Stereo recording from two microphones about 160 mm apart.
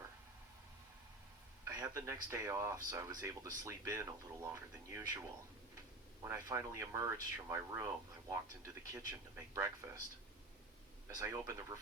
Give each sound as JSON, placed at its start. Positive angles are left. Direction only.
{"t": 1.6, "sound": "speech", "side_deg": -20}
{"t": 6.2, "sound": "speech", "side_deg": -15}
{"t": 11.1, "sound": "speech", "side_deg": -20}